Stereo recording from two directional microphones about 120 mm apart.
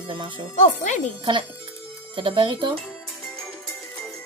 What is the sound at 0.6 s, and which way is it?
Speech, 90° left.